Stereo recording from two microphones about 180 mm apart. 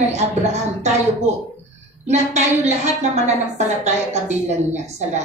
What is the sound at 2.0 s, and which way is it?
A woman's voice, 40° right (ahead or behind).